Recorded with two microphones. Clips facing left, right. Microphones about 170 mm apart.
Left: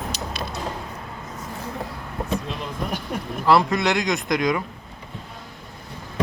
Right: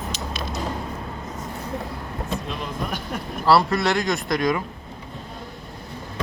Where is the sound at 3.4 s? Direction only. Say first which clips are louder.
Even; 15° left (ahead or behind).